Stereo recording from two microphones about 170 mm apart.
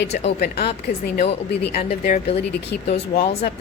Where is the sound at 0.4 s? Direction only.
75° left (ahead or behind).